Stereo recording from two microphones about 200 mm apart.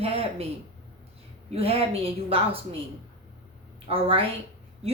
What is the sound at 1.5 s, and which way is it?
A woman's voice, 30° right (ahead or behind).